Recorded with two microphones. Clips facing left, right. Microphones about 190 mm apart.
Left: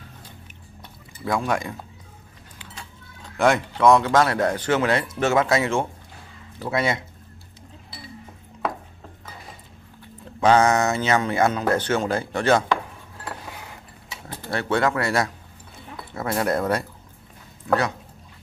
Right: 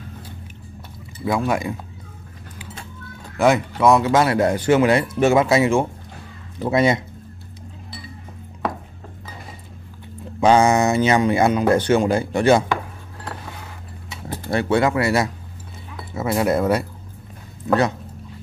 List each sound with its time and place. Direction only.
1.2 s speech: 5° right (ahead or behind)
3.3 s speech: 5° right (ahead or behind)
6.6 s speech: 20° right (ahead or behind)
10.4 s speech: 10° right (ahead or behind)
14.5 s speech: 15° right (ahead or behind)